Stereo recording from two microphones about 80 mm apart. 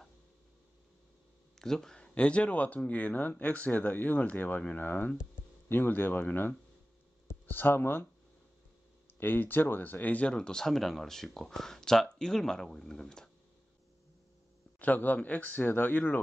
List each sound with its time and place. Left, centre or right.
1.6 s speech: centre; by 8.1 s left
9.2 s speech: left; by 13.3 s centre
14.8 s speech: left